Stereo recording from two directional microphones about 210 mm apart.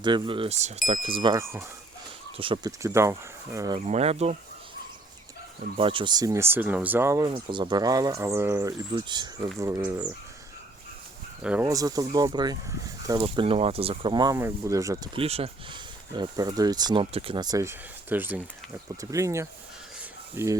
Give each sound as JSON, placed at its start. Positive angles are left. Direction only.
{"t": 0.0, "sound": "speech", "side_deg": -25}
{"t": 2.8, "sound": "speech", "side_deg": -15}
{"t": 3.8, "sound": "speech", "side_deg": -30}
{"t": 5.7, "sound": "speech", "side_deg": -25}
{"t": 11.4, "sound": "speech", "side_deg": -10}